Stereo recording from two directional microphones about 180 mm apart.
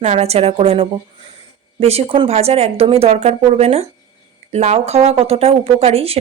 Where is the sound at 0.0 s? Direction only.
35° right (ahead or behind).